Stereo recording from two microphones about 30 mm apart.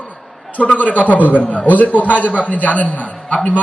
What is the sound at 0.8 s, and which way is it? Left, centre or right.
A man's voice, left.